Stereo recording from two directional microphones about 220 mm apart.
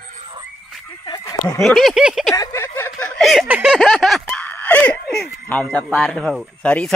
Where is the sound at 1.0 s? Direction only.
15° left (ahead or behind).